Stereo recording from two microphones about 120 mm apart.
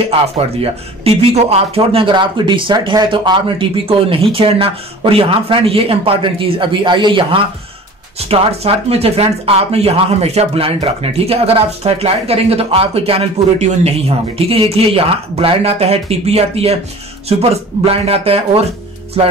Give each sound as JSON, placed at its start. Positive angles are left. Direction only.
{"t": 0.4, "sound": "speech", "side_deg": -55}
{"t": 8.3, "sound": "speech", "side_deg": -55}